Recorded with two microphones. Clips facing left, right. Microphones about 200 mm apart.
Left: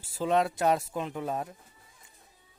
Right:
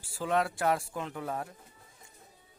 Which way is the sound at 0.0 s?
20° left (ahead or behind).